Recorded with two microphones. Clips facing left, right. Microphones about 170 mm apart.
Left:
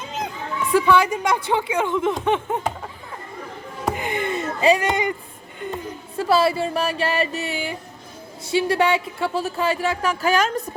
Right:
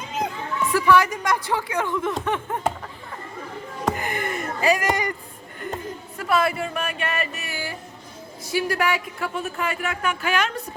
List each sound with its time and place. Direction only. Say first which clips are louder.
0.7 s a woman's voice: left 2 dB; 25° left (ahead or behind)
1.5 s music: left 3 dB; 20° left (ahead or behind)
3.9 s a sound: left 3 dB; 20° left (ahead or behind)
6.1 s music: left 4 dB; 30° left (ahead or behind)
8.4 s speech: left 4 dB; 25° left (ahead or behind)